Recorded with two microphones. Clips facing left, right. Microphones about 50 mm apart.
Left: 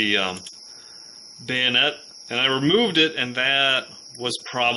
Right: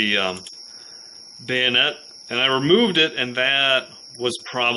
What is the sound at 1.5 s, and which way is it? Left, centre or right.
Speech, centre.